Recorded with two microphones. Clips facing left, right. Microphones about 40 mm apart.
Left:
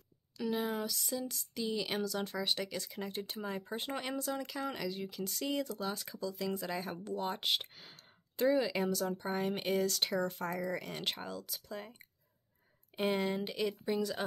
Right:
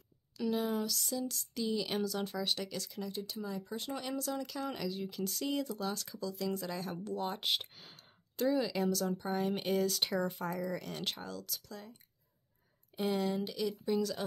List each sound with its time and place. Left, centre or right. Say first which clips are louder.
0.4 s speech: right 1 dB; centre
3.0 s speech: right 1 dB; left
4.2 s speech: even; centre
8.4 s speech: left 1 dB; centre
12.9 s speech: even; left
13.8 s speech: right 3 dB; centre